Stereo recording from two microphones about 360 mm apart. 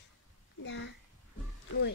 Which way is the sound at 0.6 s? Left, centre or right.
Left.